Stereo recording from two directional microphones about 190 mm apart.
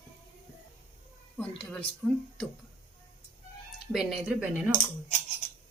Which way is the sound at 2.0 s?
Centre (ahead or behind).